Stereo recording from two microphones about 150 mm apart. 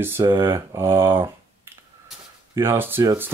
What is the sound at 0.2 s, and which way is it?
Speech, 25° right (ahead or behind).